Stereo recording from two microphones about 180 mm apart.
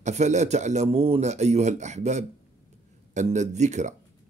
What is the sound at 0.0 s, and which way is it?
A man's voice, 40° right (ahead or behind).